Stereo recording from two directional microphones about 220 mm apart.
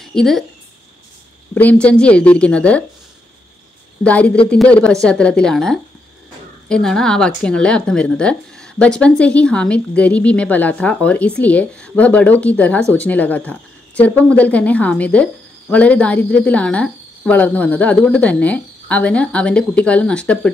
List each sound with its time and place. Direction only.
0.0 s a woman's voice: centre (ahead or behind)
1.5 s speech: 5° left (ahead or behind)
4.0 s speech: 5° left (ahead or behind)